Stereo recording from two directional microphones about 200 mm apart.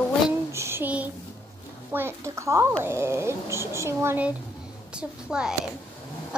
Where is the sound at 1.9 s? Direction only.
15° right (ahead or behind).